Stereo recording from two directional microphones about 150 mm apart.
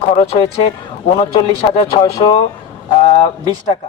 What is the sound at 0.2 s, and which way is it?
Speech, 35° left (ahead or behind).